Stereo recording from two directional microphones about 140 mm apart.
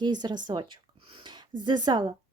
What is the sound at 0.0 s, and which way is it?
Speech, 30° right (ahead or behind).